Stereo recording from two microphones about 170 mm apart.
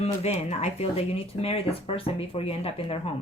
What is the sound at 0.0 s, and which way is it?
Speech, 40° left (ahead or behind).